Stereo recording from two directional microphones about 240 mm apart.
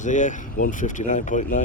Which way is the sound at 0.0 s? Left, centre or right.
Left.